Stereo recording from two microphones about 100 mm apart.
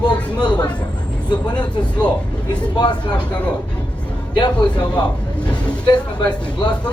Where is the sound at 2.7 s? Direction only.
45° left (ahead or behind).